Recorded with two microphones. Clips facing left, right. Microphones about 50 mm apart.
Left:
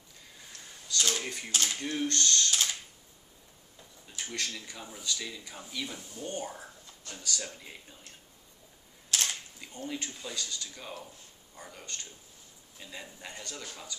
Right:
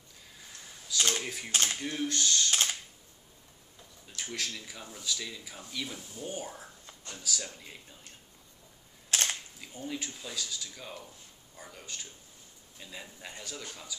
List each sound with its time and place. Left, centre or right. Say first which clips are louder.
0.9 s a sound: right 1 dB; centre
1.2 s speech: even; centre
1.5 s speech: right 1 dB; right
1.8 s speech: left 1 dB; centre
4.1 s speech: even; centre
9.1 s camera: right 1 dB; right
9.6 s a man's voice: even; centre